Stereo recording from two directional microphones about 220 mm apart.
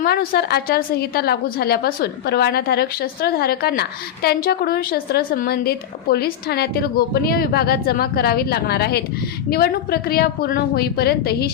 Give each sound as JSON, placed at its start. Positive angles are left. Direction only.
{"t": 0.0, "sound": "a woman's voice", "side_deg": 45}